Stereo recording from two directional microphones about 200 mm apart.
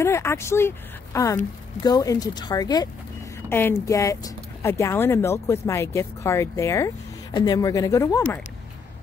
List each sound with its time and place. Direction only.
0.0 s speech: 15° left (ahead or behind)